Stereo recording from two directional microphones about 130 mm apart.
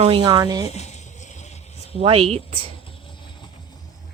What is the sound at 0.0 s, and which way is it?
Speech, 45° right (ahead or behind).